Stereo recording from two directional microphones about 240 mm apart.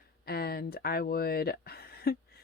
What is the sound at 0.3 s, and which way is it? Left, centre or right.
Speech, left.